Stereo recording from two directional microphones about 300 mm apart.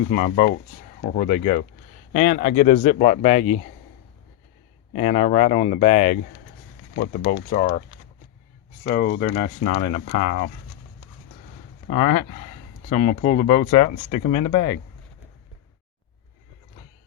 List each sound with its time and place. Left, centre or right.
0.1 s speech: left
4.9 s speech: left
8.8 s speech: left
13.0 s speech: left